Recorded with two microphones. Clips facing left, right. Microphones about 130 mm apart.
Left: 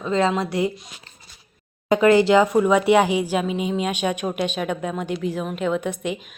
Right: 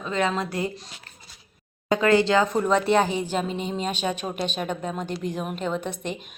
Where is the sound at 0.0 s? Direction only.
25° left (ahead or behind).